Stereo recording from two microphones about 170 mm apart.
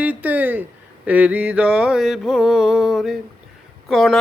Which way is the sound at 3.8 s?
Centre (ahead or behind).